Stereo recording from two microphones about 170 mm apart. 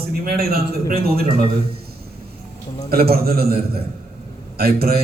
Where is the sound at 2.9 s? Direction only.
65° right (ahead or behind).